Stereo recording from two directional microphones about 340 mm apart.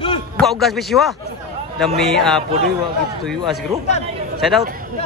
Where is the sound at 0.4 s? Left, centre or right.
Centre.